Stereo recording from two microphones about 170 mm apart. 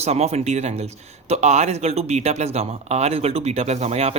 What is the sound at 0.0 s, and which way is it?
Speech, 40° right (ahead or behind).